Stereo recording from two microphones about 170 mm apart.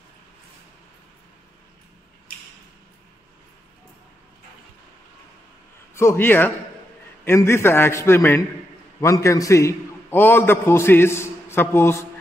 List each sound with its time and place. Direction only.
5.9 s a man's voice: 15° left (ahead or behind)